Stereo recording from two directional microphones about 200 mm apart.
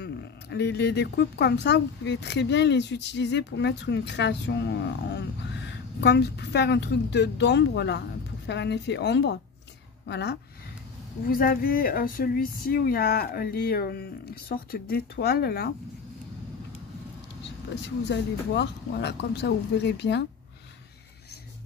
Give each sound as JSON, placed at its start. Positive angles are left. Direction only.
{"t": 0.0, "sound": "speech", "side_deg": 55}
{"t": 11.2, "sound": "speech", "side_deg": 45}
{"t": 17.8, "sound": "speech", "side_deg": 60}